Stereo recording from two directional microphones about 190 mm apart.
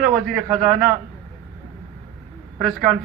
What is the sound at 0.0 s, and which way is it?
Speech, 5° right (ahead or behind).